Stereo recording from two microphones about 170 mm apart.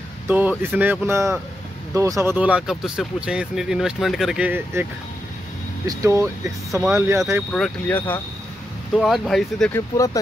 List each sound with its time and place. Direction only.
0.3 s speech: 10° right (ahead or behind)
2.3 s speech: 5° right (ahead or behind)
5.9 s speech: 20° right (ahead or behind)
7.5 s speech: 5° left (ahead or behind)
9.7 s speech: 15° left (ahead or behind)